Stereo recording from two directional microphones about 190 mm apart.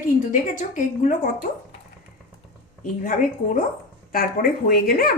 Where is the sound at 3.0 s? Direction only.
45° left (ahead or behind).